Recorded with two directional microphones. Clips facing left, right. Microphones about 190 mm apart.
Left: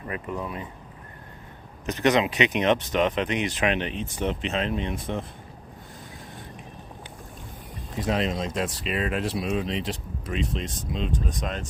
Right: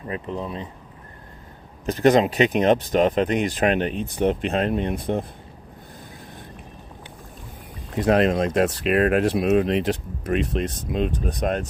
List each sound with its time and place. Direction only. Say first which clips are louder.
0.1 s speech: right 3 dB; 25° right (ahead or behind)
2.0 s speech: right 5 dB; 40° right (ahead or behind); by 5.2 s 55° right (ahead or behind)
7.9 s speech: right 8 dB; 60° right (ahead or behind)